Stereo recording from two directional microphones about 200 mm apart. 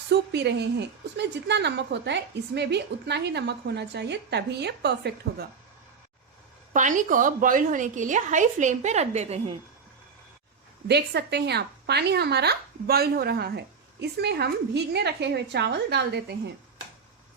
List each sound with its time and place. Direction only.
0.1 s speech: 55° right (ahead or behind)
6.7 s a woman's voice: 40° right (ahead or behind)
10.8 s speech: 55° right (ahead or behind)